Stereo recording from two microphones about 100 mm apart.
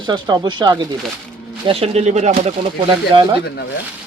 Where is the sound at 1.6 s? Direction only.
80° right.